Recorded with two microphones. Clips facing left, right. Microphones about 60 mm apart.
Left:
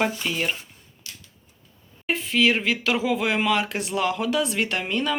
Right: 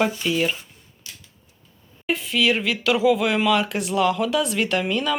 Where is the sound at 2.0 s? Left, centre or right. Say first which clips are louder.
Even; left.